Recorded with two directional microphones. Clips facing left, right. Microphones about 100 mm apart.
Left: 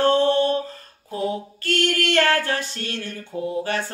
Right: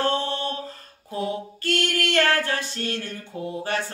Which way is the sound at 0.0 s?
35° left (ahead or behind).